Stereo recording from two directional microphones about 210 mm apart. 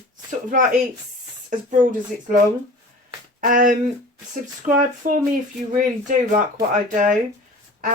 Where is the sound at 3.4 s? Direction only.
40° right (ahead or behind).